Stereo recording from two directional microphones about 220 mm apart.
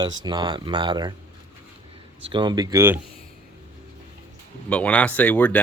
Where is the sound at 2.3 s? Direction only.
20° right (ahead or behind).